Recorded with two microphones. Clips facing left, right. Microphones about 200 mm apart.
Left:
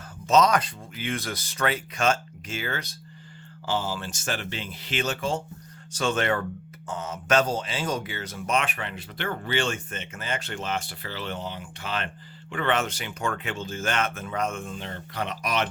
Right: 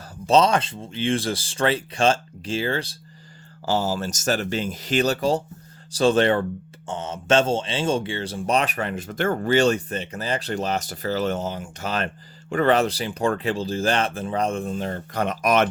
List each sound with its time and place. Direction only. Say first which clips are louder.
0.3 s speech: right 3 dB; 30° right (ahead or behind); by 15.7 s 50° right (ahead or behind)